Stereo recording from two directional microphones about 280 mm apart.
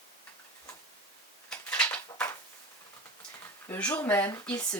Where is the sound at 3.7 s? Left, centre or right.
Centre.